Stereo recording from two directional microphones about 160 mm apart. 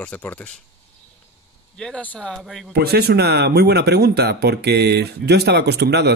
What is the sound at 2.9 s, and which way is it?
Speech, 90° right.